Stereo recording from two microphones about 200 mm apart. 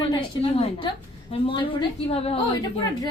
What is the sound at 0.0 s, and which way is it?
A woman's voice, 30° left (ahead or behind).